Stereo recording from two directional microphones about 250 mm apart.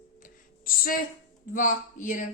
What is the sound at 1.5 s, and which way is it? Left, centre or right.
Speech, left.